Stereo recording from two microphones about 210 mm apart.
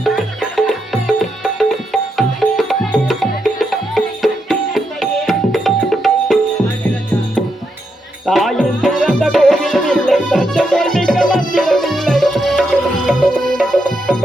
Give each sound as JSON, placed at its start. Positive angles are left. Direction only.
{"t": 0.5, "sound": "music", "side_deg": 0}
{"t": 8.3, "sound": "music", "side_deg": 0}